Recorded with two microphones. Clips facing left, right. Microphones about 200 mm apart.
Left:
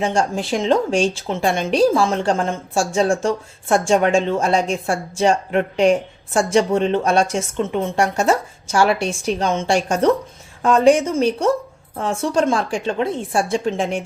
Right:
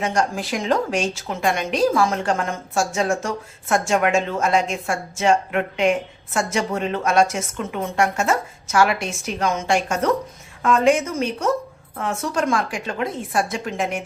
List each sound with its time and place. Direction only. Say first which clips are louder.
0.0 s a woman's voice: left 3 dB; 30° left (ahead or behind)